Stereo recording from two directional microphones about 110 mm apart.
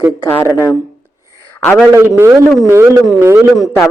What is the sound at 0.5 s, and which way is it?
Speech, 25° left (ahead or behind).